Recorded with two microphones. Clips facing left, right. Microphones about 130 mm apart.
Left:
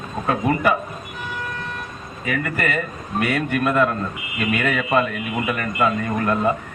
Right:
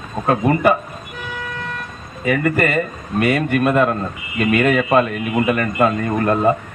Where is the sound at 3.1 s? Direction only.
60° right (ahead or behind).